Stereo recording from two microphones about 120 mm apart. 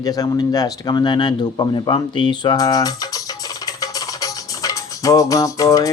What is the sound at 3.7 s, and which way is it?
Music, 30° left (ahead or behind).